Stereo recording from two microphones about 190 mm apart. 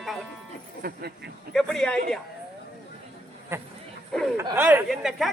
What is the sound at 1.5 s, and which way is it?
Speech, 5° left (ahead or behind).